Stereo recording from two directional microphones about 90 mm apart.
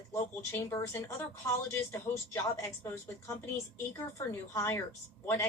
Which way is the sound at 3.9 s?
35° left (ahead or behind).